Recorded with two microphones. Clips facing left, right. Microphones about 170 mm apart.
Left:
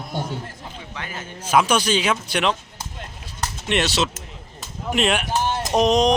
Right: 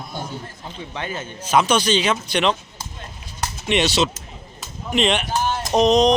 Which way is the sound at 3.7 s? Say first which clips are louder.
Right 3 dB; centre (ahead or behind).